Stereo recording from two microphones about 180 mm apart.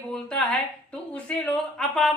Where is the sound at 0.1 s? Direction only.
5° left (ahead or behind).